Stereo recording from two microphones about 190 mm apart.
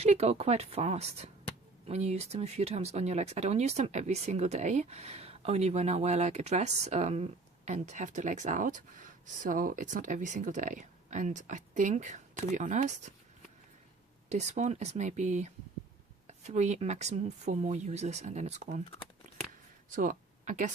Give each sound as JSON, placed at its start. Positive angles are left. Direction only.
{"t": 0.0, "sound": "speech", "side_deg": -35}
{"t": 14.3, "sound": "speech", "side_deg": -35}
{"t": 20.0, "sound": "speech", "side_deg": -40}